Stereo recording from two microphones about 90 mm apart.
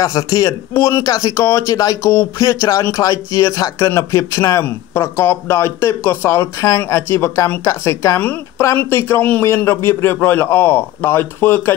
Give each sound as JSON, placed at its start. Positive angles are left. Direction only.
{"t": 0.0, "sound": "speech", "side_deg": 40}
{"t": 1.0, "sound": "speech", "side_deg": 45}
{"t": 1.3, "sound": "speech", "side_deg": 35}
{"t": 2.0, "sound": "a man's voice", "side_deg": 30}